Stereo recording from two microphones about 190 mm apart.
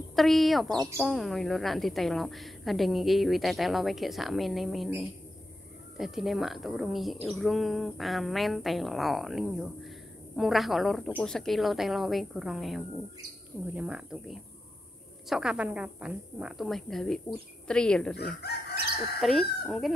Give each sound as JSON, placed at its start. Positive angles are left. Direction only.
{"t": 0.1, "sound": "a woman's voice", "side_deg": 0}
{"t": 18.1, "sound": "chicken", "side_deg": 60}
{"t": 19.1, "sound": "a woman's voice", "side_deg": 0}